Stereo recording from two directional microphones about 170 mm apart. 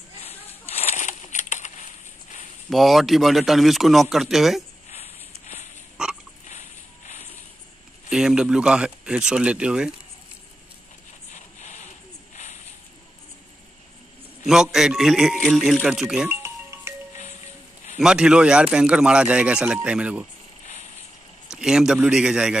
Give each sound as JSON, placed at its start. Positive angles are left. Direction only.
{"t": 0.2, "sound": "a sound", "side_deg": 35}
{"t": 2.7, "sound": "speech", "side_deg": 0}
{"t": 6.0, "sound": "frog", "side_deg": -5}
{"t": 8.1, "sound": "speech", "side_deg": -5}
{"t": 11.3, "sound": "a sound", "side_deg": 45}
{"t": 14.4, "sound": "speech", "side_deg": 0}
{"t": 16.3, "sound": "music", "side_deg": -15}
{"t": 17.9, "sound": "speech", "side_deg": -5}
{"t": 21.5, "sound": "speech", "side_deg": -5}